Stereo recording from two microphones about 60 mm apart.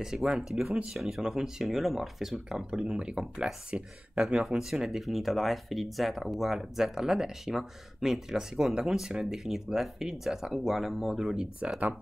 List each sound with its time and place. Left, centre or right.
0.0 s speech: centre
2.8 s speech: centre